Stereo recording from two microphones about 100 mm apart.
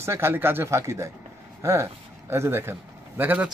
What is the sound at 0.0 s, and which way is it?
Speech, 25° right (ahead or behind).